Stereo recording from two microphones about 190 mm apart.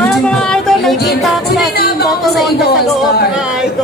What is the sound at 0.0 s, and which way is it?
Music, 5° left (ahead or behind).